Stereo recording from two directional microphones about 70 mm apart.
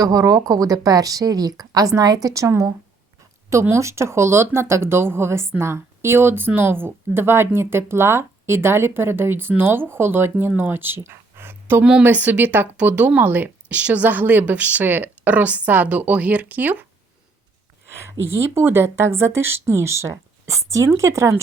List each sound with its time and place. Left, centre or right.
0.0 s speech: right
11.8 s speech: centre
12.0 s speech: right
18.0 s speech: right